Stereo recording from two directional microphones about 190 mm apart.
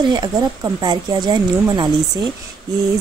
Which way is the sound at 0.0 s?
20° right (ahead or behind).